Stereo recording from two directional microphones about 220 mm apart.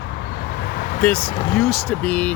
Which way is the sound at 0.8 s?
40° left (ahead or behind).